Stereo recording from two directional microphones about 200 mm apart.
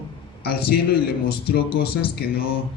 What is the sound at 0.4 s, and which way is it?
Speech, 50° left (ahead or behind).